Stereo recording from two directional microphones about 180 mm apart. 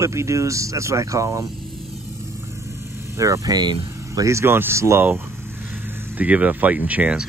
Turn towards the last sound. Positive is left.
turn(degrees=-10)  # may be behind; listen again after turning